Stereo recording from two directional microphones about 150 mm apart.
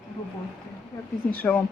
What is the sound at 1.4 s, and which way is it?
Speech, 10° left (ahead or behind).